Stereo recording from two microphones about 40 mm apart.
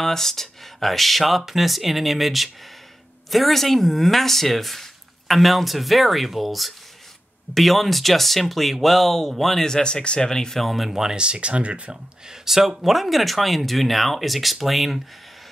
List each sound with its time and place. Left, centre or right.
0.0 s speech: centre
9.7 s speech: centre
10.6 s speech: centre
11.1 s speech: right
12.3 s speech: centre